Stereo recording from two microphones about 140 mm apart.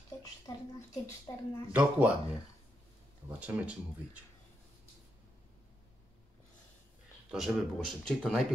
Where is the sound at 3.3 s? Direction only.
10° right (ahead or behind).